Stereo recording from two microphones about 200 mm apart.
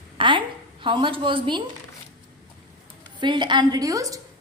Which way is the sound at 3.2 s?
20° right (ahead or behind).